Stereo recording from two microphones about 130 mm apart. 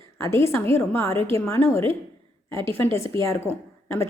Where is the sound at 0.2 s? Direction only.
20° left (ahead or behind).